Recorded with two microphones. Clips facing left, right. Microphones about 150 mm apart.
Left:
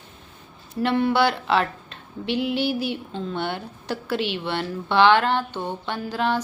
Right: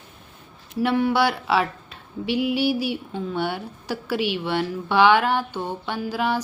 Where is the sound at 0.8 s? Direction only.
10° right (ahead or behind).